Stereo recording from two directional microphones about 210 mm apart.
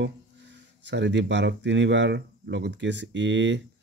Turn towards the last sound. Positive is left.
turn(degrees=-60)  # may be behind; listen again after turning